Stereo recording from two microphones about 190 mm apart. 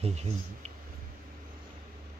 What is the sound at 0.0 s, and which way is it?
Speech, 35° right (ahead or behind).